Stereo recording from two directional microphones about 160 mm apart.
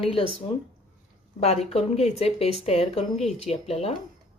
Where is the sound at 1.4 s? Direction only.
40° left (ahead or behind).